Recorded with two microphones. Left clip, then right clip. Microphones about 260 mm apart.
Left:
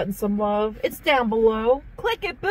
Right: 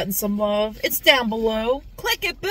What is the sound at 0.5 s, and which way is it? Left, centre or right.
Speech, right.